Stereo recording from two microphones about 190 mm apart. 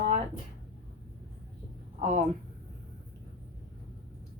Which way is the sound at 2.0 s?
40° right (ahead or behind).